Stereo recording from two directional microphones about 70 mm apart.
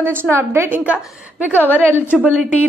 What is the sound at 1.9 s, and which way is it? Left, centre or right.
Speech, left.